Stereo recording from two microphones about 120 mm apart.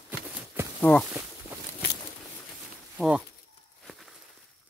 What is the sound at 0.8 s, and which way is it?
Speech, 10° left (ahead or behind).